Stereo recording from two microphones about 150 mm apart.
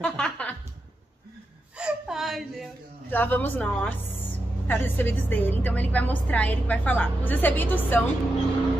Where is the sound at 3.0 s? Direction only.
10° left (ahead or behind).